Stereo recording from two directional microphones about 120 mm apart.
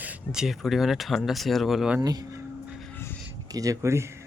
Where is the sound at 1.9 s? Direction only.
30° right (ahead or behind).